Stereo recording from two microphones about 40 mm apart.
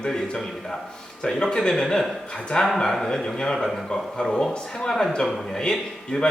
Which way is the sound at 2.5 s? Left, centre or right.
Left.